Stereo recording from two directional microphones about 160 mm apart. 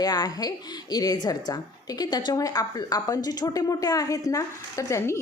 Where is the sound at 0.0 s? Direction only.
25° left (ahead or behind).